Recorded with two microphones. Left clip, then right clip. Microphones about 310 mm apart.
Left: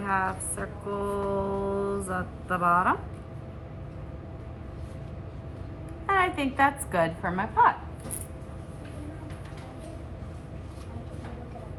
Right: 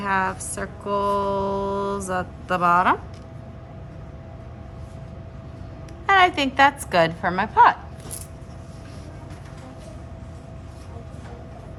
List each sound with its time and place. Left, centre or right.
0.0 s music: right
6.1 s a woman's voice: right